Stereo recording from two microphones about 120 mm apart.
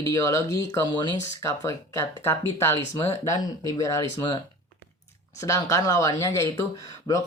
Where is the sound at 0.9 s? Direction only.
40° left (ahead or behind).